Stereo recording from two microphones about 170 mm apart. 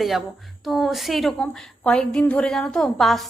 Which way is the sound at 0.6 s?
Centre (ahead or behind).